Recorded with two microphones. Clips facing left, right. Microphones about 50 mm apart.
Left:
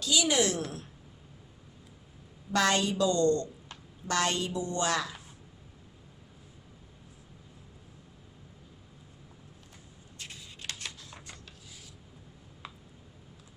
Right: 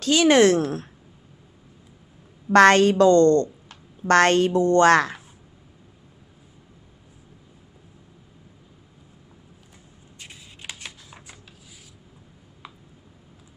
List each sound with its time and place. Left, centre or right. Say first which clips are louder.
0.0 s speech: right 11 dB; right
2.5 s a woman's voice: right 13 dB; right
10.2 s shuffling cards: right 2 dB; centre
12.6 s a sound: right 2 dB; centre